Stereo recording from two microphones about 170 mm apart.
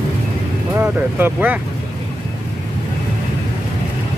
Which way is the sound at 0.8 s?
10° right (ahead or behind).